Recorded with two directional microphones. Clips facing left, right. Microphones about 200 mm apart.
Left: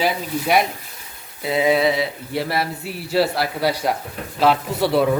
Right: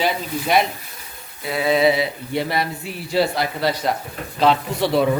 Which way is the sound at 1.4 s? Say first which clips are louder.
Left 3 dB; 25° left (ahead or behind).